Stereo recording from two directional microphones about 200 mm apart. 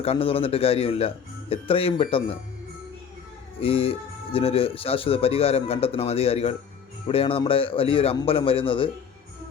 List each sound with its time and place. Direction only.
0.0 s speech: 30° left (ahead or behind)
3.6 s speech: 30° left (ahead or behind)